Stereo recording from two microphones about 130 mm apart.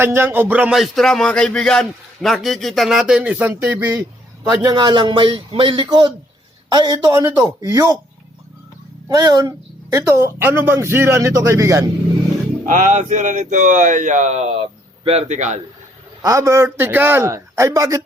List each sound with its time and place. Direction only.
0.0 s music: 15° right (ahead or behind)
4.6 s a man's voice: 35° right (ahead or behind)
7.3 s speech: 20° right (ahead or behind)
9.0 s a man's voice: 30° right (ahead or behind)
12.6 s speech: 85° right; by 15.6 s 65° right (ahead or behind)
16.2 s speech: 25° right (ahead or behind)